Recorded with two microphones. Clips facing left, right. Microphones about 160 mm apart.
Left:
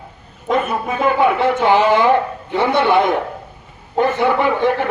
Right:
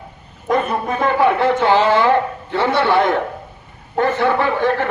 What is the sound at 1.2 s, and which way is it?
A man's voice, 20° left (ahead or behind).